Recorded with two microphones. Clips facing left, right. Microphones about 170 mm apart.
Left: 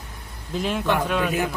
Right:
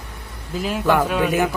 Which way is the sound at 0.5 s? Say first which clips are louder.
Right 4 dB; 5° right (ahead or behind).